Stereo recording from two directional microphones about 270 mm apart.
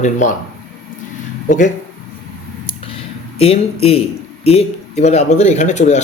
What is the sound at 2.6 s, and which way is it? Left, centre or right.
Speech, centre.